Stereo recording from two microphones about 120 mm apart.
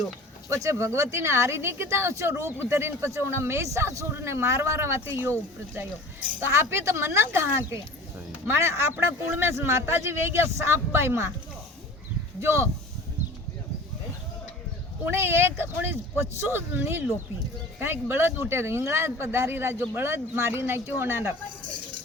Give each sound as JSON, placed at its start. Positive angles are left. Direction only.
{"t": 0.5, "sound": "speech", "side_deg": -25}
{"t": 12.4, "sound": "speech", "side_deg": -20}
{"t": 15.1, "sound": "speech", "side_deg": -20}